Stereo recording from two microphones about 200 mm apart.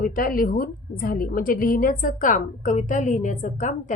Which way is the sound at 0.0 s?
45° left (ahead or behind).